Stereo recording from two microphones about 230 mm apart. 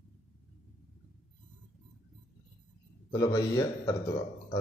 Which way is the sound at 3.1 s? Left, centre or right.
Centre.